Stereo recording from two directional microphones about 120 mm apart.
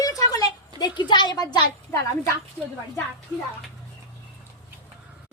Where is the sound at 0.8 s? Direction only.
40° left (ahead or behind).